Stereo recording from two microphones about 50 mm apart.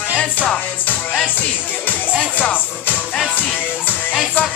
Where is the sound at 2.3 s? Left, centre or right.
Left.